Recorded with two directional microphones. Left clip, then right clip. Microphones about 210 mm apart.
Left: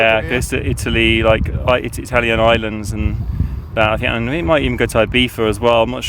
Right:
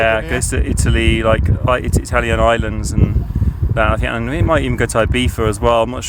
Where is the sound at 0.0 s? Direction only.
5° left (ahead or behind).